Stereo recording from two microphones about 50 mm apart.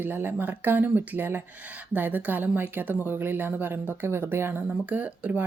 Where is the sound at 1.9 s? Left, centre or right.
Right.